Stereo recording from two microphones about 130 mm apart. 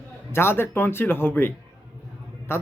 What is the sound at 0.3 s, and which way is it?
Speech, 20° left (ahead or behind).